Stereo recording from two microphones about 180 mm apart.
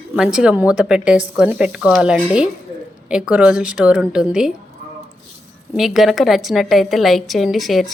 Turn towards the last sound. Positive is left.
turn(degrees=0)  # may be behind; listen again after turning